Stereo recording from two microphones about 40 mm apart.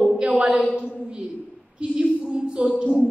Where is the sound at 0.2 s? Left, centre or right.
Right.